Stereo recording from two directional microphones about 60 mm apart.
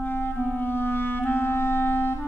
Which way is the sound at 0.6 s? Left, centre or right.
Left.